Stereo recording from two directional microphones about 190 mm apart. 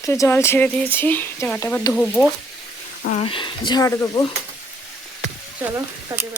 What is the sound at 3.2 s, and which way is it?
Speech, 25° left (ahead or behind).